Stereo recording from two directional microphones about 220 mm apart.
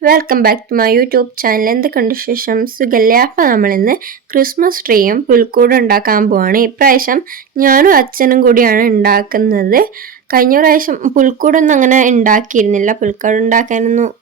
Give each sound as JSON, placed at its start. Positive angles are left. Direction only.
{"t": 0.0, "sound": "speech", "side_deg": -45}